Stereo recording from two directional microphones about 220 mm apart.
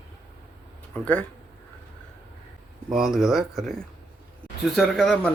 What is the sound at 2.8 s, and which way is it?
Speech, centre (ahead or behind).